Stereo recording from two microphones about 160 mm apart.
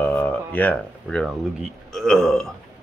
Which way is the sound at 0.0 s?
10° left (ahead or behind).